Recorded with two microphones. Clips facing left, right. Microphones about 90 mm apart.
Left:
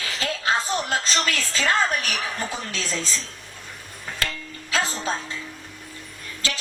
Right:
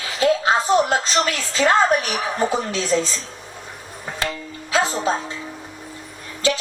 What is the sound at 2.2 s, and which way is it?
Speech, 25° right (ahead or behind).